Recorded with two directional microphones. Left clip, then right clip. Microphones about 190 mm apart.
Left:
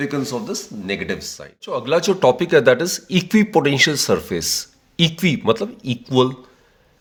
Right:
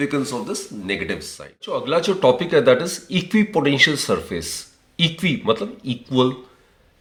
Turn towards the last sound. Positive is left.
turn(degrees=50)  # may be behind; listen again after turning